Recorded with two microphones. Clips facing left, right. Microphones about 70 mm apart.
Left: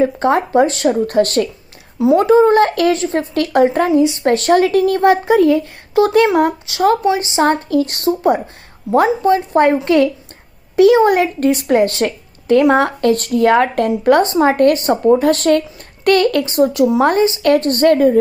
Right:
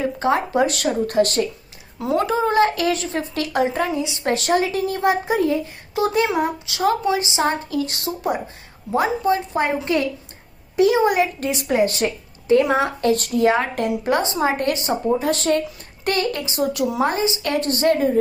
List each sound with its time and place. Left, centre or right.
0.0 s speech: left
2.9 s a woman's voice: left
7.2 s a woman's voice: left
15.2 s a child's voice: left
16.6 s a woman's voice: left
17.0 s a woman's voice: left